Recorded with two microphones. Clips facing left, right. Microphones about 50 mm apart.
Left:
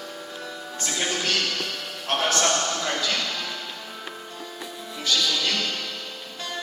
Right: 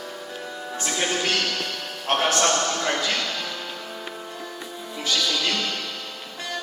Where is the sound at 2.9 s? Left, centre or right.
Centre.